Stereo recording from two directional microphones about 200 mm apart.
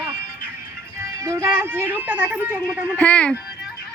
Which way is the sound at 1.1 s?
15° right (ahead or behind).